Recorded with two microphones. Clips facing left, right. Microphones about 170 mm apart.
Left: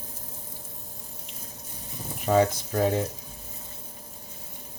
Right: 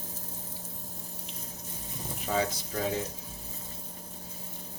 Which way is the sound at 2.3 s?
60° left (ahead or behind).